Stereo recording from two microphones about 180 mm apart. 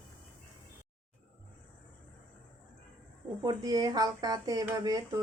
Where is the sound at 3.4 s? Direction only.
20° right (ahead or behind).